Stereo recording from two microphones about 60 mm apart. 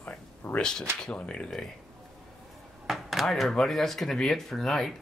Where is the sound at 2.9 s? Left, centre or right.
Centre.